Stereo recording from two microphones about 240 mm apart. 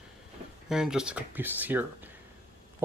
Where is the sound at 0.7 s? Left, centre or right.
Centre.